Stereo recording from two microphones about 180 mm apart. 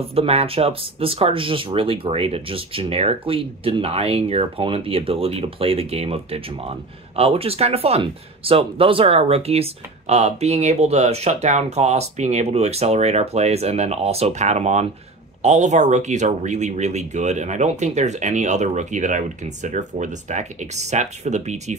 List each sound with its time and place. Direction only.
0.0 s speech: 35° right (ahead or behind)